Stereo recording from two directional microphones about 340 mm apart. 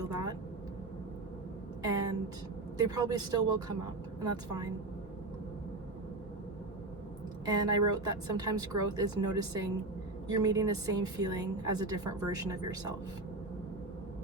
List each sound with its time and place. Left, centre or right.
0.0 s vehicle: centre
2.7 s a woman's voice: centre
7.4 s a woman's voice: centre